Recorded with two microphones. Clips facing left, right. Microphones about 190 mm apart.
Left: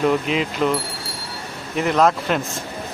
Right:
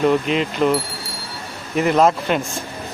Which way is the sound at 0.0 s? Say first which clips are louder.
Right 2 dB; centre (ahead or behind).